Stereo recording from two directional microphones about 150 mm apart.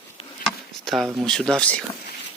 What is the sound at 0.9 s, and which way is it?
Speech, centre (ahead or behind).